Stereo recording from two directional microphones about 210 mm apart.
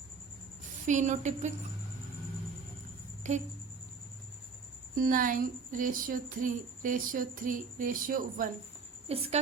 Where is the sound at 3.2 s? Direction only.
35° right (ahead or behind).